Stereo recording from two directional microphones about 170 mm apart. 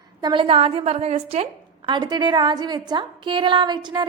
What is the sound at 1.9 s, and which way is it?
A woman's voice, 25° right (ahead or behind).